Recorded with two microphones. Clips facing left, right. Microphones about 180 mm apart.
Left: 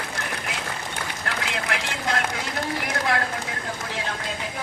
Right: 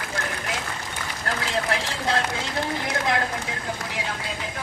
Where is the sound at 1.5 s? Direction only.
35° right (ahead or behind).